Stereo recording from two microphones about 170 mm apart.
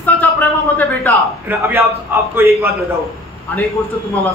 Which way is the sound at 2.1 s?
10° right (ahead or behind).